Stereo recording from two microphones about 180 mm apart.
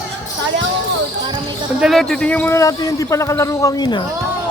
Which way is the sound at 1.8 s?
Centre (ahead or behind).